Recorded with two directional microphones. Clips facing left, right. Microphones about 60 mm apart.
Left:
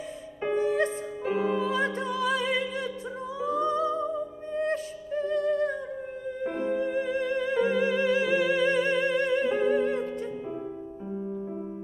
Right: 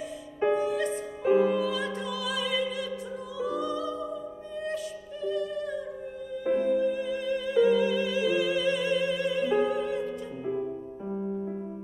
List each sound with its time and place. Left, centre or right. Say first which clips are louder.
0.6 s music: left 2 dB; left
1.3 s music: right 5 dB; left
1.6 s music: left 2 dB; left